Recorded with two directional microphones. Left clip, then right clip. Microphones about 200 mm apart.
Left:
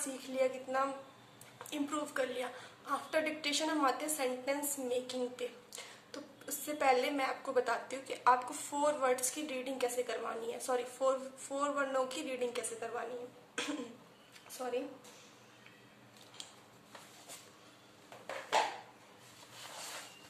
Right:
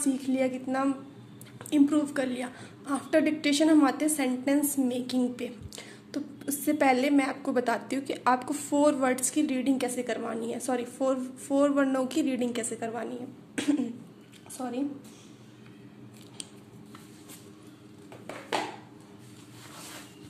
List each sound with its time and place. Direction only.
0.0 s a woman's voice: 35° right (ahead or behind)
14.6 s a woman's voice: 20° right (ahead or behind)